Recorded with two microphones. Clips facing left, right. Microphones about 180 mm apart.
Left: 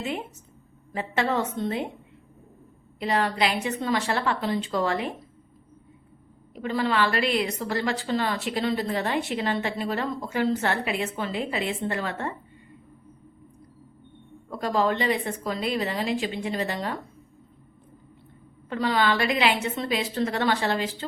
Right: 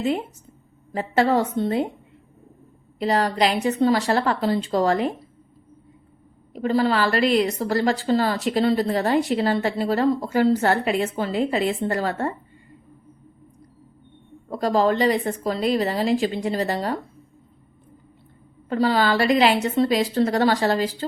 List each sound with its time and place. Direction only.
0.9 s a woman's voice: 35° right (ahead or behind)
3.0 s a woman's voice: 35° right (ahead or behind)
6.5 s a woman's voice: 35° right (ahead or behind)
14.5 s a woman's voice: 35° right (ahead or behind)
18.7 s a woman's voice: 35° right (ahead or behind)